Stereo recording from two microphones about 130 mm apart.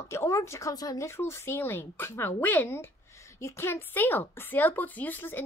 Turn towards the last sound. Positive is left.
turn(degrees=15)  # may be behind; listen again after turning